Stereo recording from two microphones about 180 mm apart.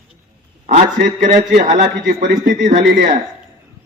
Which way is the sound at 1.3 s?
45° right (ahead or behind).